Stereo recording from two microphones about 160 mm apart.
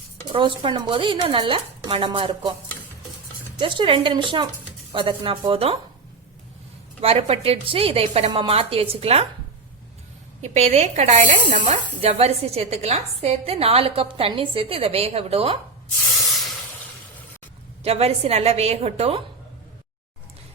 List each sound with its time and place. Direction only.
0.3 s speech: 30° right (ahead or behind)
3.6 s speech: 30° right (ahead or behind)
7.0 s speech: 35° right (ahead or behind)
10.4 s speech: 40° right (ahead or behind)
16.2 s hiss: centre (ahead or behind)
17.8 s speech: 40° right (ahead or behind)